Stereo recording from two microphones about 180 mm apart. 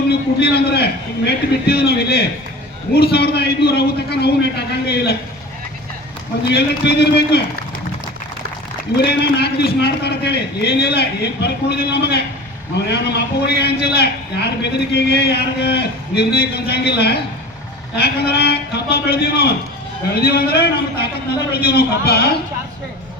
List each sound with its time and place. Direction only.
0.1 s a man's voice: 65° left (ahead or behind)
6.4 s a man's voice: 65° left (ahead or behind)
9.0 s a man's voice: 65° left (ahead or behind)